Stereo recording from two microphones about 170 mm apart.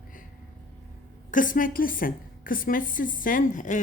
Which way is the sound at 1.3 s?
50° left (ahead or behind).